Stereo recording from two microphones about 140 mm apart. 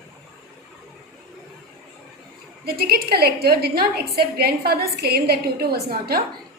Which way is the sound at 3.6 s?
90° right.